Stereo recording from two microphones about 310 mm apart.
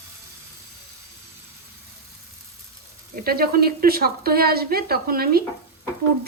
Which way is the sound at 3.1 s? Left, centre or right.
Right.